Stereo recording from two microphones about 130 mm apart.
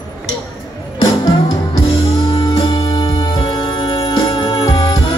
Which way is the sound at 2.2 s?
35° left (ahead or behind).